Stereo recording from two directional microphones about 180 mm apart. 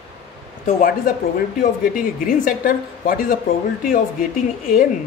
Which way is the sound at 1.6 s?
50° left (ahead or behind).